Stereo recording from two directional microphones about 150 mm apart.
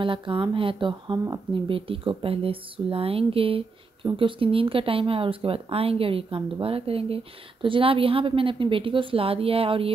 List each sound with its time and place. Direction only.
0.0 s speech: 35° right (ahead or behind)